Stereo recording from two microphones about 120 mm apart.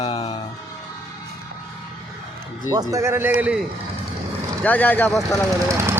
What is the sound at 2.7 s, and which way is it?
Speech, 30° right (ahead or behind).